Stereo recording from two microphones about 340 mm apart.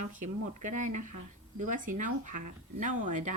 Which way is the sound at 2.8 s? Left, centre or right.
Right.